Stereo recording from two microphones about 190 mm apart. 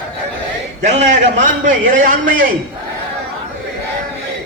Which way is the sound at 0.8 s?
40° right (ahead or behind).